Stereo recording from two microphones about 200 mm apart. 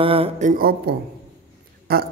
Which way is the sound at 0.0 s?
30° right (ahead or behind).